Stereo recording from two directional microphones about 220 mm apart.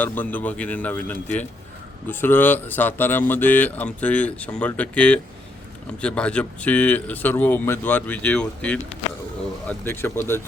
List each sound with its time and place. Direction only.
0.0 s speech: 10° left (ahead or behind)